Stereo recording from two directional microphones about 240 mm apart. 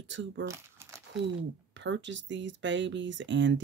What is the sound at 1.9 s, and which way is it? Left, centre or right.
Speech, right.